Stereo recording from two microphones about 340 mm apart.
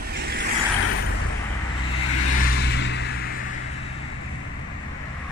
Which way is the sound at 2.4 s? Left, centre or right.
Left.